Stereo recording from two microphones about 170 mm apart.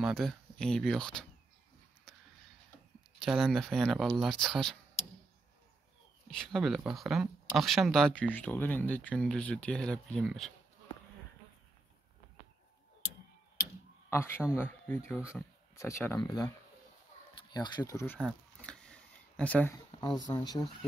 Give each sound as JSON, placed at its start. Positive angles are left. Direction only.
{"t": 0.0, "sound": "speech", "side_deg": 0}
{"t": 3.2, "sound": "speech", "side_deg": 0}
{"t": 6.2, "sound": "speech", "side_deg": 0}
{"t": 14.1, "sound": "speech", "side_deg": 15}
{"t": 17.4, "sound": "a sound", "side_deg": 25}
{"t": 20.2, "sound": "speech", "side_deg": 25}